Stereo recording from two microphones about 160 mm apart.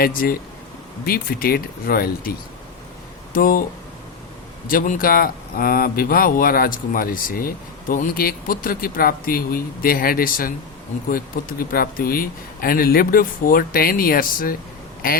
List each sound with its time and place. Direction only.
0.0 s speech: 65° left (ahead or behind)
3.3 s speech: 65° left (ahead or behind)
4.7 s speech: 60° left (ahead or behind)